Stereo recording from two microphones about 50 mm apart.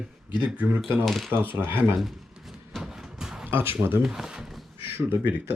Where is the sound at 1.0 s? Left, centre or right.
Centre.